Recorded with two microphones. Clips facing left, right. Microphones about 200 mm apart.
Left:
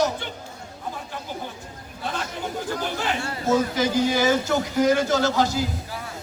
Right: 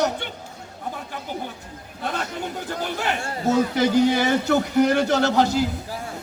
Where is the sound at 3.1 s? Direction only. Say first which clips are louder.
Even; 60° right (ahead or behind).